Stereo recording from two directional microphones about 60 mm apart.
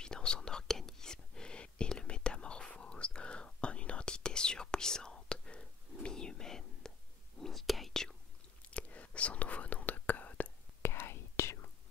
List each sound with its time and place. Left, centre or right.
0.0 s whispering: centre
8.6 s whispering: left
10.8 s whispering: left